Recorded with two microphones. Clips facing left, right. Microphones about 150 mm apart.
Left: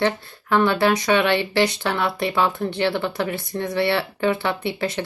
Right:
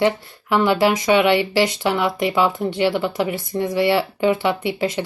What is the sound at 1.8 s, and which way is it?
Speech, 15° right (ahead or behind).